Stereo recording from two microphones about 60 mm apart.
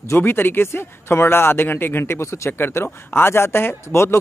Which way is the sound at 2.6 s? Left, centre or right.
Left.